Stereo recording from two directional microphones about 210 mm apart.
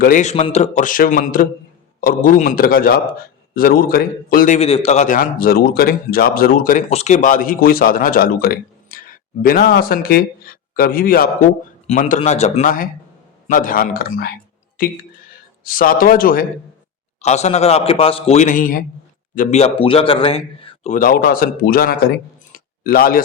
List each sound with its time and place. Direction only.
0.0 s a man's voice: 35° left (ahead or behind)
17.2 s a man's voice: 30° left (ahead or behind)
22.5 s a sound: 45° left (ahead or behind)